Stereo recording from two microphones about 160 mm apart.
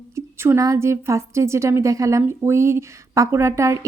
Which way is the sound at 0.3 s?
15° right (ahead or behind).